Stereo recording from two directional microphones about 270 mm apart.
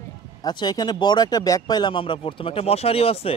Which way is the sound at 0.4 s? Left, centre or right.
Centre.